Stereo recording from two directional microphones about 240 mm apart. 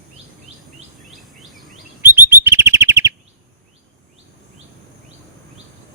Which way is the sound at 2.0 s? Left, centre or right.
Centre.